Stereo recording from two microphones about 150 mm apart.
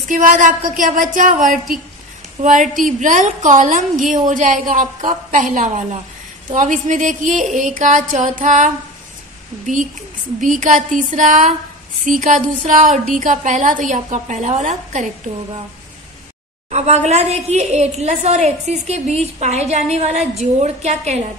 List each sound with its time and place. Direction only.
0.1 s a woman's voice: 60° right (ahead or behind)
10.4 s a woman's voice: 55° right (ahead or behind)
16.7 s a woman's voice: 45° right (ahead or behind)